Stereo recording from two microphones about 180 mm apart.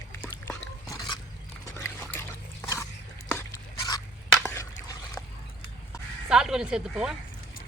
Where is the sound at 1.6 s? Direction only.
15° left (ahead or behind).